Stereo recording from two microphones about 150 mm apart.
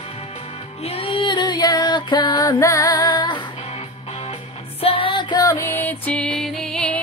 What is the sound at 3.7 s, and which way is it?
Music, 40° left (ahead or behind).